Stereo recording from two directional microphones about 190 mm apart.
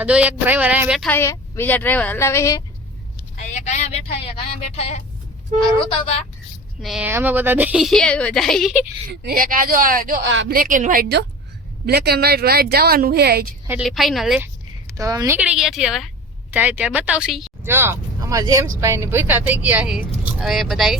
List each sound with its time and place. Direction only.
0.0 s speech: 5° right (ahead or behind)
1.1 s a woman's voice: 15° left (ahead or behind)
3.3 s a sound: 35° left (ahead or behind)
4.7 s speech: 35° left (ahead or behind)
6.8 s a woman's voice: centre (ahead or behind)
9.2 s speech: 50° right (ahead or behind)
10.2 s a woman's voice: 75° right (ahead or behind)
10.5 s speech: 45° right (ahead or behind)
13.7 s a woman's voice: 5° right (ahead or behind)
14.9 s speech: 20° right (ahead or behind)
15.4 s a woman's voice: 5° right (ahead or behind)
17.6 s speech: 10° right (ahead or behind)